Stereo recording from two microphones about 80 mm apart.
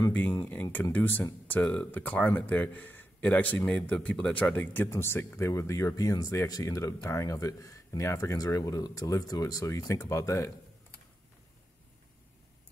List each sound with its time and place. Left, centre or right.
0.1 s speech: left
4.8 s speech: left